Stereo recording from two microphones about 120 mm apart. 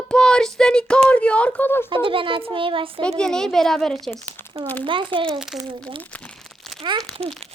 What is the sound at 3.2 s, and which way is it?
Child singing, 5° left (ahead or behind).